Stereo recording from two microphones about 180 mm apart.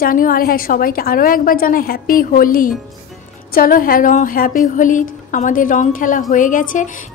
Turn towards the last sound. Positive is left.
turn(degrees=45)  # may be behind; listen again after turning